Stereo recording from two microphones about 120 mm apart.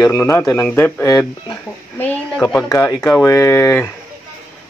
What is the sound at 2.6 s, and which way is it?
Speech, 30° left (ahead or behind).